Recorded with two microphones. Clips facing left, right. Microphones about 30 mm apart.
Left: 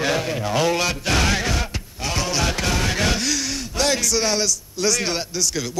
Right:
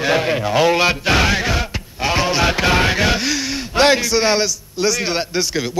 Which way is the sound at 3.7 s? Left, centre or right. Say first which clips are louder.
Right 7 dB; right.